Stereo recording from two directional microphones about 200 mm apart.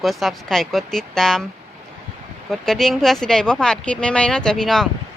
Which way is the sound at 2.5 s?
Centre (ahead or behind).